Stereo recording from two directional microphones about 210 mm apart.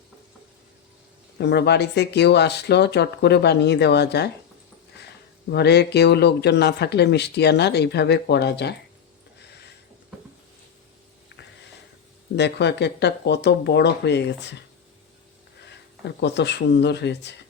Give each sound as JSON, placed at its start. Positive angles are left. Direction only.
{"t": 1.4, "sound": "speech", "side_deg": 55}
{"t": 5.5, "sound": "speech", "side_deg": 50}
{"t": 12.4, "sound": "speech", "side_deg": 55}
{"t": 15.6, "sound": "speech", "side_deg": 55}